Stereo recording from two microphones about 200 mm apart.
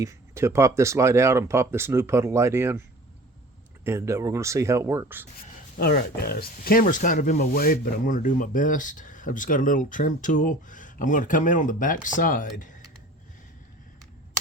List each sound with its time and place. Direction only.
0.0 s speech: 15° right (ahead or behind)
3.8 s speech: 15° right (ahead or behind)
5.5 s speech: 50° left (ahead or behind)